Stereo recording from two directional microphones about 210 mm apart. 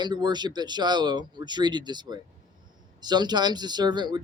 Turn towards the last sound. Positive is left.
turn(degrees=-20)  # may be behind; listen again after turning